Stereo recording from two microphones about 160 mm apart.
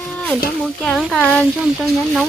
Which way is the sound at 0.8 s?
Centre (ahead or behind).